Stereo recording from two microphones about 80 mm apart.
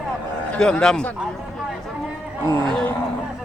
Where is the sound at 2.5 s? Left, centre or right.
Right.